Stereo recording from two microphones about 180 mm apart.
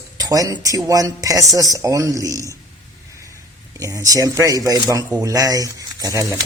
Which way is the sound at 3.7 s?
20° right (ahead or behind).